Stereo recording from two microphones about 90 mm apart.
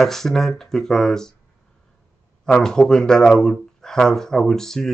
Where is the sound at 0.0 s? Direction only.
5° left (ahead or behind).